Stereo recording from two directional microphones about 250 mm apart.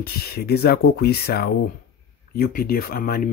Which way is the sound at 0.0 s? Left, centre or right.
Left.